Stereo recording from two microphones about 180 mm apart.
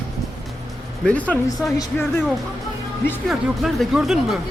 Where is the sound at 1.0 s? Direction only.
5° left (ahead or behind).